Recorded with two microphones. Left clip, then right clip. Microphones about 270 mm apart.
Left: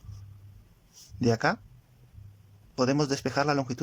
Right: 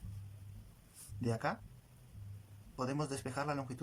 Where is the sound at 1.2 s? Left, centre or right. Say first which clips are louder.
Left 12 dB; left.